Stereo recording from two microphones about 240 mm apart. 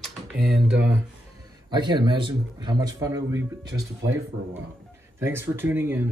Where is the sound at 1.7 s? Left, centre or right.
Centre.